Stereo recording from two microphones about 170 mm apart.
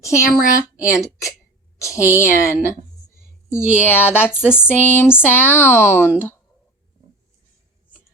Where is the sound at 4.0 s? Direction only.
10° left (ahead or behind).